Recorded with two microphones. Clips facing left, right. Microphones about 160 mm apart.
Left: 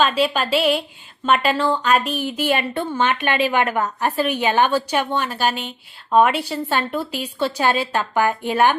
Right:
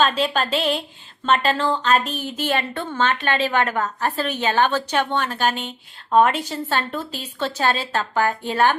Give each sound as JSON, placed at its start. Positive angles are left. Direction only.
{"t": 0.0, "sound": "speech", "side_deg": 10}